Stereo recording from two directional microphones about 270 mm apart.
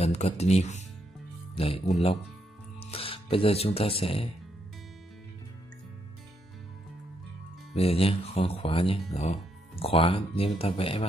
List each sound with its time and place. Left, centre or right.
0.0 s speech: left
2.8 s speech: left
7.7 s speech: left